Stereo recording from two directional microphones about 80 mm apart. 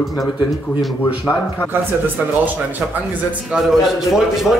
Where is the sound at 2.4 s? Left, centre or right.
Right.